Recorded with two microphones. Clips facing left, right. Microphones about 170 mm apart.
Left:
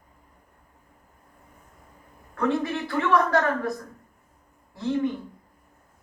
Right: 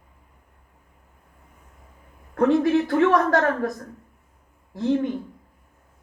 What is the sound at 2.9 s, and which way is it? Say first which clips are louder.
Speech: left 1 dB; 40° right (ahead or behind).